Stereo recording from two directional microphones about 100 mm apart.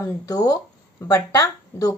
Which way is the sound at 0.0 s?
35° left (ahead or behind).